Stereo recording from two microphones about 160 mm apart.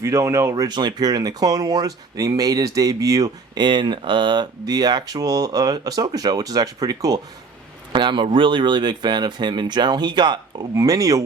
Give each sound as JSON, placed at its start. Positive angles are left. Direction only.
{"t": 0.0, "sound": "speech", "side_deg": -20}